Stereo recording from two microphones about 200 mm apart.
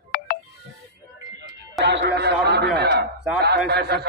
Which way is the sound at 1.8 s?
60° right (ahead or behind).